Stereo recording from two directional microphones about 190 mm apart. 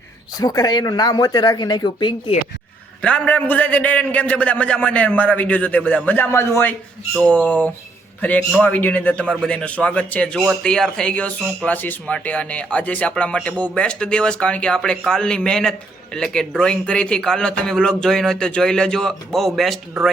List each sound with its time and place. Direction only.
0.3 s speech: 20° left (ahead or behind)
3.0 s a man's voice: 5° left (ahead or behind)
10.3 s speech: 5° right (ahead or behind)